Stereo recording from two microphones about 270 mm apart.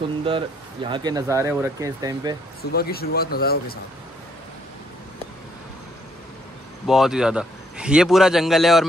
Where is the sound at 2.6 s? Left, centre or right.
Left.